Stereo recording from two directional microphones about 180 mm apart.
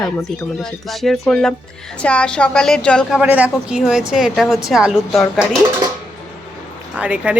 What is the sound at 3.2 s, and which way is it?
A woman's voice, 5° right (ahead or behind).